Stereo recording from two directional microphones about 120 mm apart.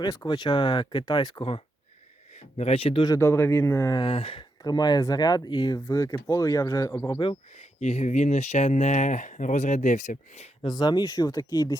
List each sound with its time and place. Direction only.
0.3 s speech: 40° left (ahead or behind)
2.3 s speech: 65° left (ahead or behind)
3.2 s speech: 20° left (ahead or behind)
4.0 s speech: 50° left (ahead or behind)
4.6 s speech: 35° left (ahead or behind)
7.1 s speech: 45° left (ahead or behind)
7.5 s speech: 70° left (ahead or behind)
10.6 s speech: 35° left (ahead or behind)